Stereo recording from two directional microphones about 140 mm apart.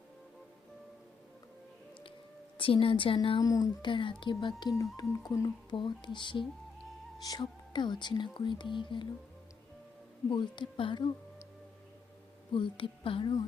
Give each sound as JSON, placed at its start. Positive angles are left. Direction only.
{"t": 2.6, "sound": "a woman's voice", "side_deg": 40}
{"t": 5.7, "sound": "a woman's voice", "side_deg": 35}
{"t": 10.2, "sound": "a woman's voice", "side_deg": 35}
{"t": 12.5, "sound": "a woman's voice", "side_deg": 40}